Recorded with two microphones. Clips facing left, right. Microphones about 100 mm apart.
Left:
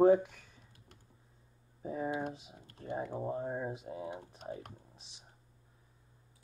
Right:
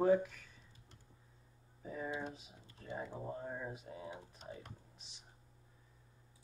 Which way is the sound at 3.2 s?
25° left (ahead or behind).